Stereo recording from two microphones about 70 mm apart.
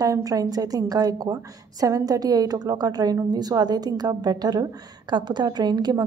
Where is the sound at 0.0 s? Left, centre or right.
Right.